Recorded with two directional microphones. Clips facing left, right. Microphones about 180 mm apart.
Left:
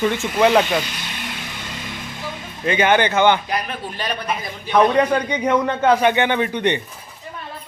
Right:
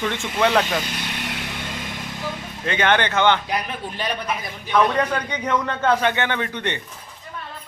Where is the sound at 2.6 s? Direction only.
10° left (ahead or behind).